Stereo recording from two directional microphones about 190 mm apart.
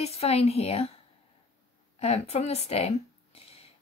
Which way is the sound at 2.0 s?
35° left (ahead or behind).